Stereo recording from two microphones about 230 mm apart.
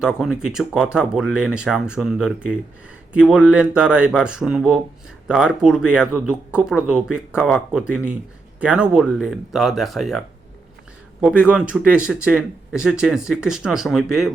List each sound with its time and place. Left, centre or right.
0.2 s speech: centre